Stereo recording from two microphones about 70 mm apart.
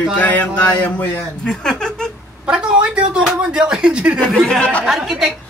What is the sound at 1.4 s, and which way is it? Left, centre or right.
Speech, centre.